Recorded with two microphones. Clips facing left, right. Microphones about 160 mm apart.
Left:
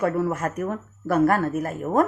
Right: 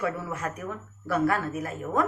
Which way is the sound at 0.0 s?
50° left (ahead or behind).